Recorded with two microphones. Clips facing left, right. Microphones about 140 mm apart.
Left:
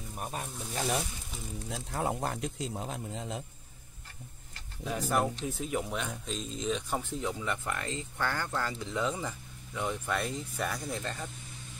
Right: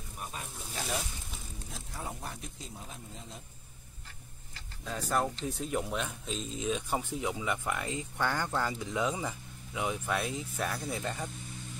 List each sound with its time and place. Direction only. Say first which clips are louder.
1.7 s a man's voice: left 9 dB; 75° left (ahead or behind)
5.0 s speech: left 1 dB; 5° left (ahead or behind); by 11.2 s 10° right (ahead or behind)